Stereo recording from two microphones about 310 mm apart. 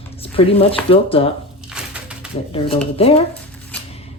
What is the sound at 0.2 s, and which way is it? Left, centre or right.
Speech, centre.